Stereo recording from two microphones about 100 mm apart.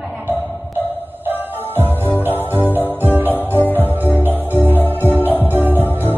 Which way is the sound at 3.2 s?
20° left (ahead or behind).